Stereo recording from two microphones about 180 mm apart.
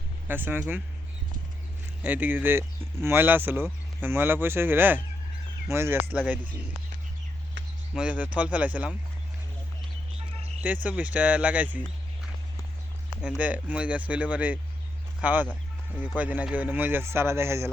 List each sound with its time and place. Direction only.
0.3 s speech: 10° right (ahead or behind)
2.0 s speech: 10° right (ahead or behind)
7.9 s speech: 5° right (ahead or behind)
10.8 s speech: 10° right (ahead or behind)
13.4 s speech: 10° right (ahead or behind)